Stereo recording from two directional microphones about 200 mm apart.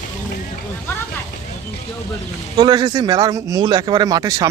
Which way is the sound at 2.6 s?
20° right (ahead or behind).